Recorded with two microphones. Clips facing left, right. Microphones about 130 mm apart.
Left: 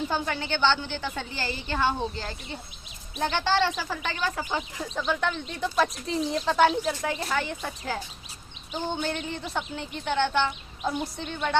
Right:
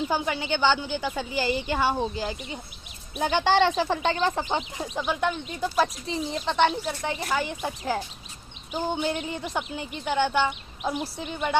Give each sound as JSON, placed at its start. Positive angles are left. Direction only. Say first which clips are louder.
{"t": 0.1, "sound": "a woman's voice", "louder": "right 2 dB", "side_deg": -15}
{"t": 5.0, "sound": "speech", "louder": "right 1 dB", "side_deg": -10}
{"t": 7.4, "sound": "a woman's voice", "louder": "right 3 dB", "side_deg": -15}